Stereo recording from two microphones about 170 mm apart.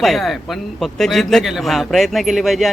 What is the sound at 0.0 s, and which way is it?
A man's voice, centre (ahead or behind).